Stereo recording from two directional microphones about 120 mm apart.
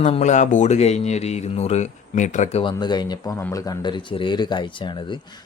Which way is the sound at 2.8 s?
35° left (ahead or behind).